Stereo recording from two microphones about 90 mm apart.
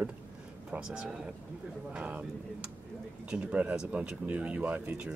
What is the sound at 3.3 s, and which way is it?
Speech, 10° right (ahead or behind).